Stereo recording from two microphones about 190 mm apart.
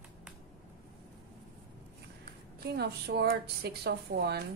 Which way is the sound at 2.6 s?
55° right (ahead or behind).